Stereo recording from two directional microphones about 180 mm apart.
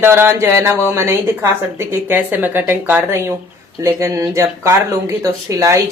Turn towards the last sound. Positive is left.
turn(degrees=-15)  # may be behind; listen again after turning